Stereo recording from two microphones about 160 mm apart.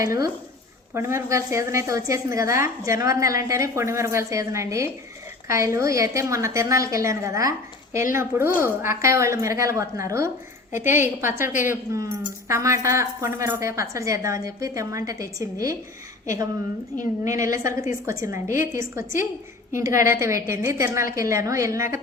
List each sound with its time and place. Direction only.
0.0 s a woman's voice: 20° right (ahead or behind)
10.7 s a woman's voice: 50° left (ahead or behind)
10.9 s a woman's voice: 15° right (ahead or behind)